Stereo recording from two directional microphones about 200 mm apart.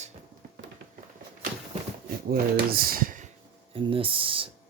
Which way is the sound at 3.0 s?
40° right (ahead or behind).